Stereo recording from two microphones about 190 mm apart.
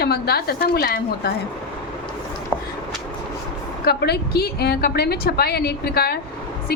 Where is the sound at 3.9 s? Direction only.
55° left (ahead or behind).